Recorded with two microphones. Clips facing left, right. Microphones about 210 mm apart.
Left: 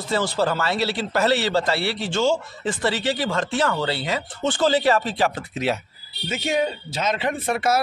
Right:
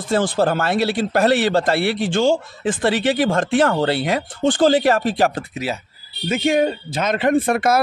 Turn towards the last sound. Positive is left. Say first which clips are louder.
# right 6 dB
turn(degrees=-55)  # may be behind; listen again after turning